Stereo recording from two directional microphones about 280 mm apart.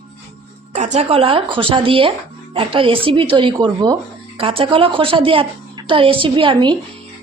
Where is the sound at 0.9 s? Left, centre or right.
Centre.